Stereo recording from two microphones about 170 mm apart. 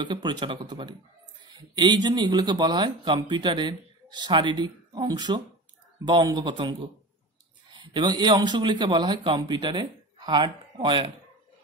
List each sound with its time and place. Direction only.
0.1 s speech: 25° right (ahead or behind)